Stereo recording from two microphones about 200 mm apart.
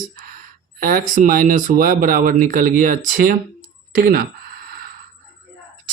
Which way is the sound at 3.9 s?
50° right (ahead or behind).